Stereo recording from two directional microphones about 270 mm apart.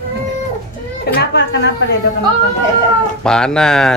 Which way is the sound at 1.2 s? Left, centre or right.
Left.